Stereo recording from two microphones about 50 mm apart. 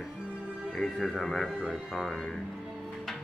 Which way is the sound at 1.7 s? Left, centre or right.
Centre.